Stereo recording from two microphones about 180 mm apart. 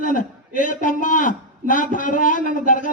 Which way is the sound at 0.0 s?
45° left (ahead or behind).